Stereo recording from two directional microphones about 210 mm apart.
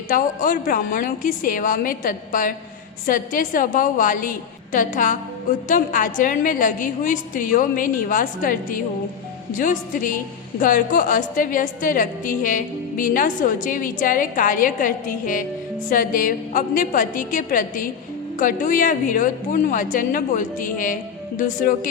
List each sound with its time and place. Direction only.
0.1 s a woman's voice: 40° left (ahead or behind)